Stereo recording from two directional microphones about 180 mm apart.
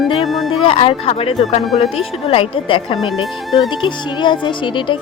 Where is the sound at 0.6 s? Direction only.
30° left (ahead or behind).